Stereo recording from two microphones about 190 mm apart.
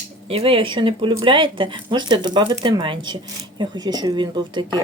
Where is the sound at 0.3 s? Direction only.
30° right (ahead or behind).